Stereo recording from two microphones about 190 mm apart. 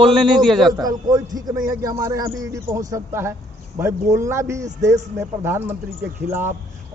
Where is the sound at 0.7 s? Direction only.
20° right (ahead or behind).